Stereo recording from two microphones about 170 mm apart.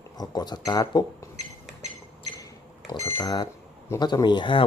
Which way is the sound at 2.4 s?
20° left (ahead or behind).